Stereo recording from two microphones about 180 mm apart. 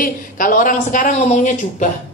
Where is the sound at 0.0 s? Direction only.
45° left (ahead or behind).